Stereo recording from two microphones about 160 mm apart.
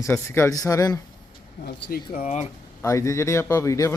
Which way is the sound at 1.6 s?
70° left (ahead or behind).